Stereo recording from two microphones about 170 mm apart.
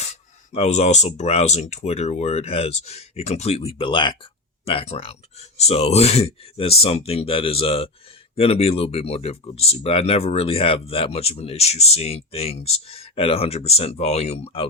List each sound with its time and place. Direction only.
0.5 s speech: 40° left (ahead or behind)